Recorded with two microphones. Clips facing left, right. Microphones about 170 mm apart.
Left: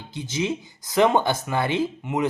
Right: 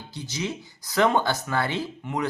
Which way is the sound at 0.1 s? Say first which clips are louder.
Left 5 dB; 20° left (ahead or behind).